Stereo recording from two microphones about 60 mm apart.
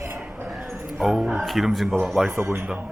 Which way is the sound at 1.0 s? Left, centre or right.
Centre.